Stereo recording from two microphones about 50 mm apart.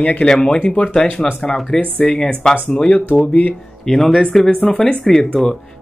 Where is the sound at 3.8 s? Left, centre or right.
Centre.